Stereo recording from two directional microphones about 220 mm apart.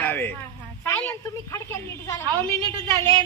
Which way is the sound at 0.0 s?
10° left (ahead or behind).